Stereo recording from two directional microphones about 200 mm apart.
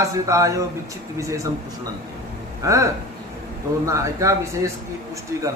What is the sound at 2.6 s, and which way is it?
Speech, 15° right (ahead or behind).